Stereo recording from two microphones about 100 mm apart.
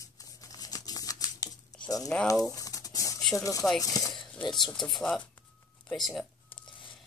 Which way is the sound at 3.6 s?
5° left (ahead or behind).